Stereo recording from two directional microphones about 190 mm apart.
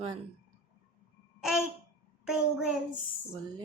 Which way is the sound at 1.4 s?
Centre (ahead or behind).